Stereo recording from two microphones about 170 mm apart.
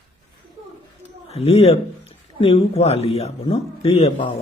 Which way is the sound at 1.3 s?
40° left (ahead or behind).